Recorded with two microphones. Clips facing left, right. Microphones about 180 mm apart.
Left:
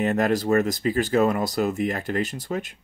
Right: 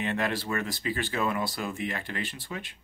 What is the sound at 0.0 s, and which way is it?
Speech, 45° left (ahead or behind).